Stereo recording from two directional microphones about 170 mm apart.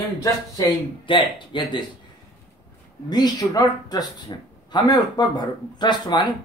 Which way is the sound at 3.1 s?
25° left (ahead or behind).